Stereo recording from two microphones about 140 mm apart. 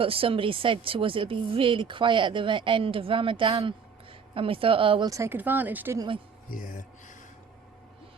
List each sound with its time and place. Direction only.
0.0 s speech: 40° right (ahead or behind)
5.0 s speech: 20° right (ahead or behind)
6.5 s music: 75° left (ahead or behind)